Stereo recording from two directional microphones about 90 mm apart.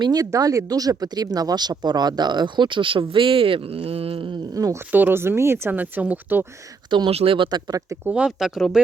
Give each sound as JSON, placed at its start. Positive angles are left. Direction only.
{"t": 0.0, "sound": "speech", "side_deg": -45}
{"t": 4.5, "sound": "speech", "side_deg": -40}
{"t": 4.9, "sound": "speech", "side_deg": -20}
{"t": 6.9, "sound": "speech", "side_deg": -75}
{"t": 8.0, "sound": "speech", "side_deg": -15}